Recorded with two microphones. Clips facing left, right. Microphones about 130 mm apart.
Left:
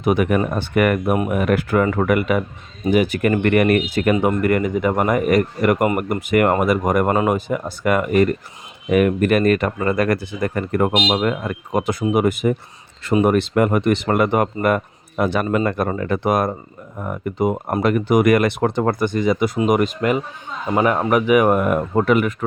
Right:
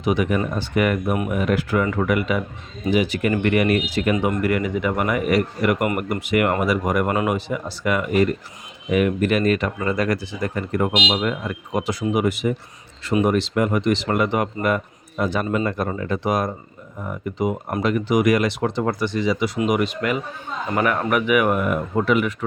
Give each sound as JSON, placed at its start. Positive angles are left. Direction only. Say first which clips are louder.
{"t": 0.0, "sound": "speech", "louder": "left 3 dB", "side_deg": 50}